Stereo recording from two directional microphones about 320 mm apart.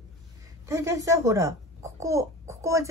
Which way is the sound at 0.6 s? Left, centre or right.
Centre.